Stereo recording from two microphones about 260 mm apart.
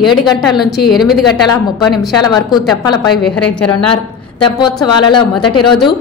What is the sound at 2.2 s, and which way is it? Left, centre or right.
Speech, centre.